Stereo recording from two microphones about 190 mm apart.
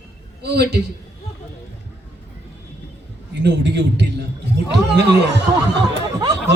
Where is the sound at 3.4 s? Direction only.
65° right (ahead or behind).